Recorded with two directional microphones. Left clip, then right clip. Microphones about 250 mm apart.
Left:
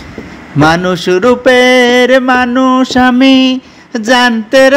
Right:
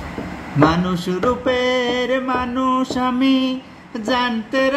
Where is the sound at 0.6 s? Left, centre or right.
Left.